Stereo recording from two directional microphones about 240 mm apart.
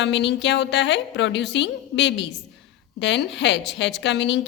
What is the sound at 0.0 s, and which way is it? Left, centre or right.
A woman's voice, left.